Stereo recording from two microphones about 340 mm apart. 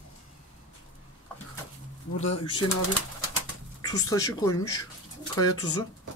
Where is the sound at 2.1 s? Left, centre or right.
Centre.